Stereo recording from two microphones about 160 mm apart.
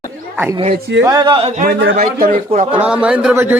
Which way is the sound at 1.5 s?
65° right (ahead or behind).